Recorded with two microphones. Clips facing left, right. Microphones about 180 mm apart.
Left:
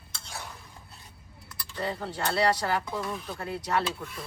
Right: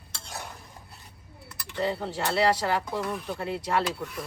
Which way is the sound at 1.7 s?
25° right (ahead or behind).